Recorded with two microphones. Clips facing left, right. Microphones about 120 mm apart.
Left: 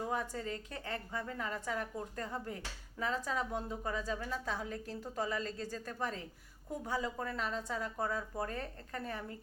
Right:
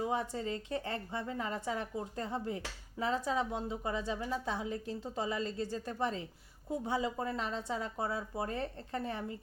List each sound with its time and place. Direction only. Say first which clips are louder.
0.1 s a woman's voice: right 3 dB; 25° right (ahead or behind)
7.9 s speech: right 1 dB; 15° right (ahead or behind)
8.5 s a woman's voice: right 4 dB; 25° right (ahead or behind)